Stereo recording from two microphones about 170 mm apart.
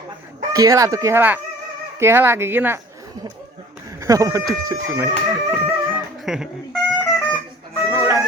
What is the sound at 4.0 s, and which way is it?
Speech, 20° right (ahead or behind).